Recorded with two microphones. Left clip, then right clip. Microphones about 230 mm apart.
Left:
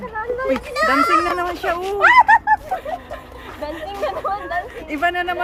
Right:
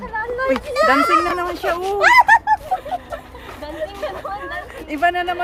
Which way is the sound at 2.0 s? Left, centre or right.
Right.